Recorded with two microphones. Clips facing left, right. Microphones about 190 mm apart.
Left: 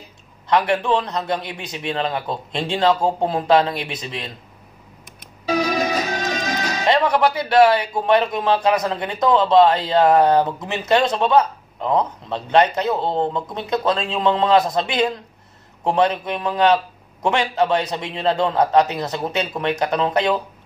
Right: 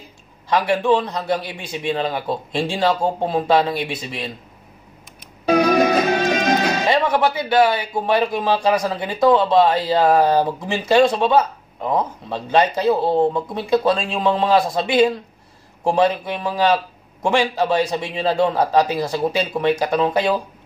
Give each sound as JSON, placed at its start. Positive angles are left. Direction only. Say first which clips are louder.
{"t": 0.5, "sound": "speech", "louder": "right 1 dB", "side_deg": -10}
{"t": 5.4, "sound": "music", "louder": "right 5 dB", "side_deg": -55}
{"t": 6.9, "sound": "speech", "louder": "left 3 dB", "side_deg": -5}